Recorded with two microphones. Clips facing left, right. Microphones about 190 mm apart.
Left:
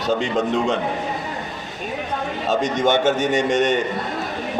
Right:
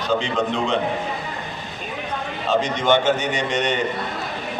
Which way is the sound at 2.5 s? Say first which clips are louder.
Even; 45° left (ahead or behind).